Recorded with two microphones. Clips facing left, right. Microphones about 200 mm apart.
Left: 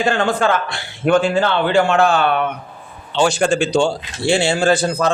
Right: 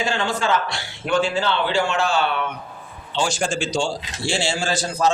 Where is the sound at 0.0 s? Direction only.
55° left (ahead or behind).